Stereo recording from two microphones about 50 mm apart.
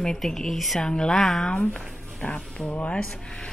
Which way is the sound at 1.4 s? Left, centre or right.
Left.